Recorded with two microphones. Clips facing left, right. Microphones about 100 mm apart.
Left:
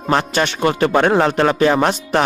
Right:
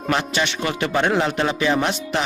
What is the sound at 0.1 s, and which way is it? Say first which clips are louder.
Speech: left 5 dB; 40° left (ahead or behind).